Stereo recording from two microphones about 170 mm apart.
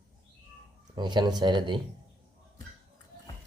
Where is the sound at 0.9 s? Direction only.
25° right (ahead or behind).